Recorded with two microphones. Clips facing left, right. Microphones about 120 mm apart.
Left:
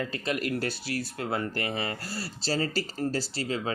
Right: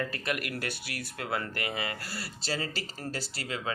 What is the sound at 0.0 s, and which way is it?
Speech, 25° left (ahead or behind).